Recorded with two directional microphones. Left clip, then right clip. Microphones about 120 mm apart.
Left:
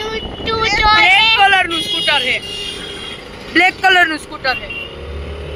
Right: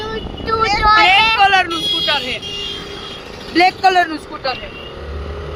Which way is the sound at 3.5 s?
15° right (ahead or behind).